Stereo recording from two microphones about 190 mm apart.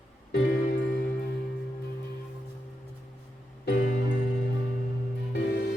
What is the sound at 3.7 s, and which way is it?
Music, 50° left (ahead or behind).